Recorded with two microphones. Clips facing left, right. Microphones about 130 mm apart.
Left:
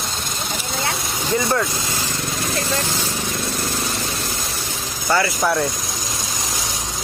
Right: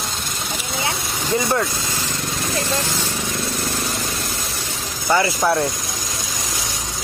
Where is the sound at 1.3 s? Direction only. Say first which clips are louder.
Even; 25° right (ahead or behind).